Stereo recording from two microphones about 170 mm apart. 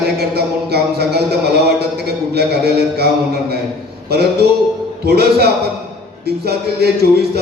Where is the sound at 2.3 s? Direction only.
70° right (ahead or behind).